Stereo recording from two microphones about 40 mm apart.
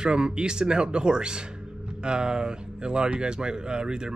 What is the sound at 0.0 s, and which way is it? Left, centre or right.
Speech, right.